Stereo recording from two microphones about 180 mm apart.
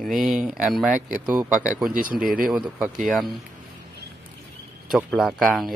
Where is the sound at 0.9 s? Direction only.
50° right (ahead or behind).